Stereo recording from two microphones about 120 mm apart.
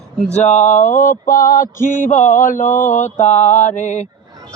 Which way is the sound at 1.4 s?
90° left.